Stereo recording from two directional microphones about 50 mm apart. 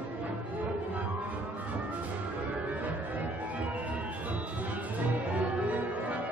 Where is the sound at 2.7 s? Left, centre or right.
Right.